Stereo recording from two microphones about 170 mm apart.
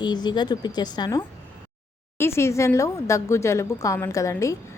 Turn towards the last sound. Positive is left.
turn(degrees=20)  # may be behind; listen again after turning